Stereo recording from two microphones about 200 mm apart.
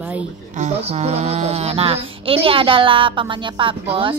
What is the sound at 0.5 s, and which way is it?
Speech, 35° right (ahead or behind).